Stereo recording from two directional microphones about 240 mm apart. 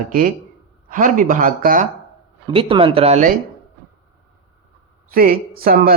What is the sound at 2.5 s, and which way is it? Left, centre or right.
Speech, right.